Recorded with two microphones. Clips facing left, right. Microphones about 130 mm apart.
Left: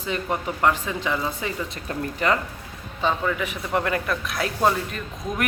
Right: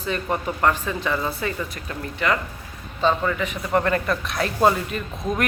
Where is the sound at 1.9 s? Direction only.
35° left (ahead or behind).